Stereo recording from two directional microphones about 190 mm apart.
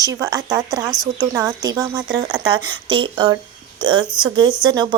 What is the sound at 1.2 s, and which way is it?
A woman's voice, 20° right (ahead or behind).